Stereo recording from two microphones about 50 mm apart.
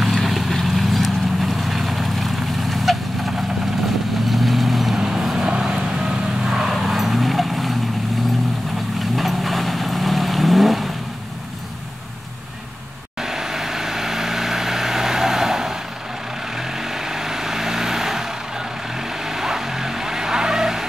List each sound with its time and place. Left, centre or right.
0.0 s vehicle: centre
9.1 s vehicle: centre
13.2 s vehicle: centre